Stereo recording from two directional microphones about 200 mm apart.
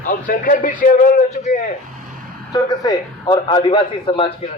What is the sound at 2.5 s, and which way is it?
A man's voice, 20° left (ahead or behind).